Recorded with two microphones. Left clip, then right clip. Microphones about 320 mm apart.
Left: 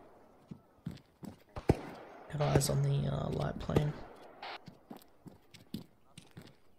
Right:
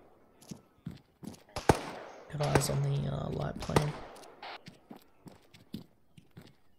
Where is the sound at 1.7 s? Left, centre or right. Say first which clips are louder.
Right 6 dB; right.